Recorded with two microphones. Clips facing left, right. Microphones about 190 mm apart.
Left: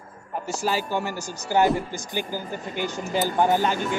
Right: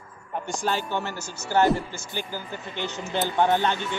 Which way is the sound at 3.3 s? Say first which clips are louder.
Even; 5° left (ahead or behind).